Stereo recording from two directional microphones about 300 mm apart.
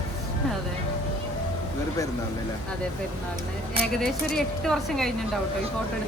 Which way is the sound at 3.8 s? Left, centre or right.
Centre.